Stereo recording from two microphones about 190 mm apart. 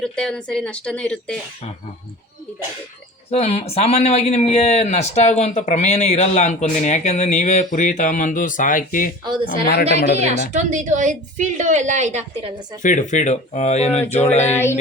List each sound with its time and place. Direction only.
0.0 s speech: 5° left (ahead or behind)
3.2 s speech: 35° left (ahead or behind)
9.2 s speech: 25° right (ahead or behind)
10.2 s a woman's voice: 35° right (ahead or behind)
12.8 s speech: 40° left (ahead or behind)
14.5 s music: 15° left (ahead or behind)